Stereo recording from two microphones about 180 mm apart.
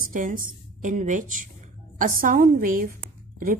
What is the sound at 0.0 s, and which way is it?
A woman's voice, 50° right (ahead or behind).